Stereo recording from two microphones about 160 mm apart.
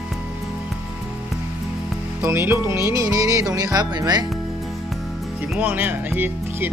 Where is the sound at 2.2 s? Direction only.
15° right (ahead or behind).